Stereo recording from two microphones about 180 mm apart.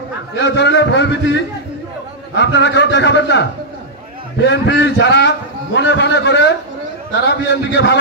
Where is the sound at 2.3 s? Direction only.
75° left (ahead or behind).